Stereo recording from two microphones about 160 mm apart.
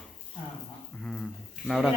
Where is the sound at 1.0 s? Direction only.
5° left (ahead or behind).